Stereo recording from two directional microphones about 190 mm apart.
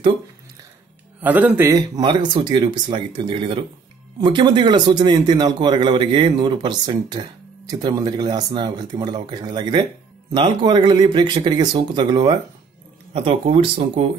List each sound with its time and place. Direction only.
1.2 s speech: 10° right (ahead or behind); by 14.0 s 30° right (ahead or behind)